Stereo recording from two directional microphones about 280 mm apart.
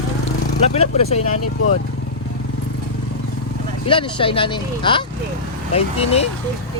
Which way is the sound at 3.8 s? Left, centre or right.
Centre.